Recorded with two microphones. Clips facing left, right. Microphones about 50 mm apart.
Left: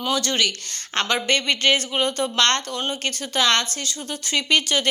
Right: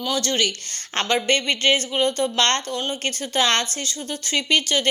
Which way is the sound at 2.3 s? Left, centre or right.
Centre.